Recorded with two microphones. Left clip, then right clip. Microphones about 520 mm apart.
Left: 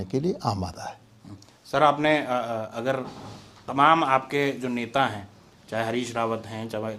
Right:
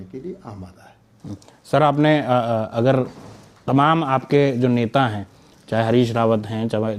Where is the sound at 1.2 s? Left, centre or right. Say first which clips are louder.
Right 11 dB; right.